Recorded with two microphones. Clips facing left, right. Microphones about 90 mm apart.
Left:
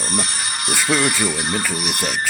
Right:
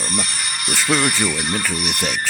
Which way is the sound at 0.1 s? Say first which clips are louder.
Left 1 dB; 35° left (ahead or behind).